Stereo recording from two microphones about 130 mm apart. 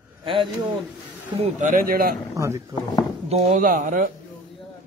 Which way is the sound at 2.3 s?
20° right (ahead or behind).